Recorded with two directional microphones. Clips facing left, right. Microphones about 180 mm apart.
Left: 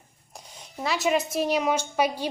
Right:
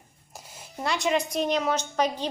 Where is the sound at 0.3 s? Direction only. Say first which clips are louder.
Even; 5° right (ahead or behind).